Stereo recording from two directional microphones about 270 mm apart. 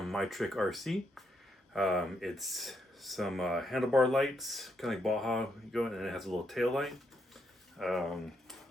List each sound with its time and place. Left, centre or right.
0.0 s speech: centre